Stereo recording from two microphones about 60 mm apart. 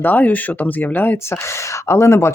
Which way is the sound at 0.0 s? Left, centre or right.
Left.